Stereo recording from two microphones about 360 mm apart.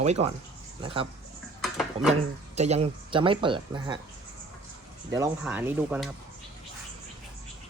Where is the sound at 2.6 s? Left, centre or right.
Centre.